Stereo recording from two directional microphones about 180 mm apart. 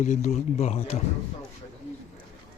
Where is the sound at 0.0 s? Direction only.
40° left (ahead or behind).